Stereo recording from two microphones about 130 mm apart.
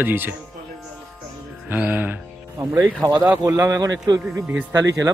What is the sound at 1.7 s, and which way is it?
Speech, 15° right (ahead or behind).